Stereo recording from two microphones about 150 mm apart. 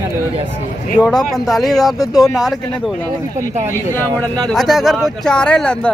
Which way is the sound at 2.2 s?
Centre (ahead or behind).